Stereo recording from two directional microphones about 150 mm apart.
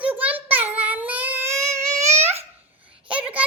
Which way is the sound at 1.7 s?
50° right (ahead or behind).